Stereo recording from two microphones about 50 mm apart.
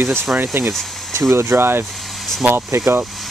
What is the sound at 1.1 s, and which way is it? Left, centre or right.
Speech, right.